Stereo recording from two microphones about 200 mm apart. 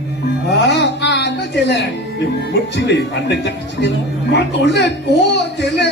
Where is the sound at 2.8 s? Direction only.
60° left (ahead or behind).